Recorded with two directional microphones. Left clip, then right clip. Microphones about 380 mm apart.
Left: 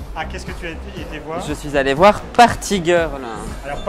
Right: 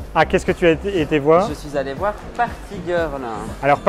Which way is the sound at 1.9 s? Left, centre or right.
Left.